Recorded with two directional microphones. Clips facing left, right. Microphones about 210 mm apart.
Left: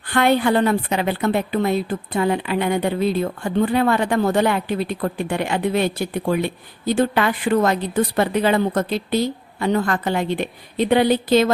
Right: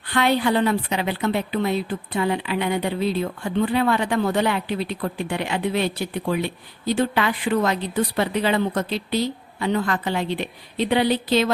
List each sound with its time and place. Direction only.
0.1 s a woman's voice: 50° left (ahead or behind)